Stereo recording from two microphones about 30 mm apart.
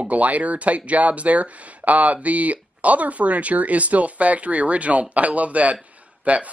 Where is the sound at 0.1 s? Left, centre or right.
Right.